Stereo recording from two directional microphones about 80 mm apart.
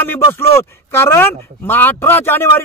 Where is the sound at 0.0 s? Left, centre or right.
Left.